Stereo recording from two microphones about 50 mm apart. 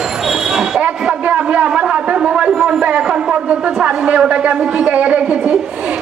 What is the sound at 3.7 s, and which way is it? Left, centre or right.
A woman's voice, centre.